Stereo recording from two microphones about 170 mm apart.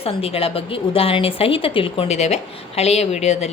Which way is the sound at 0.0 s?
35° left (ahead or behind).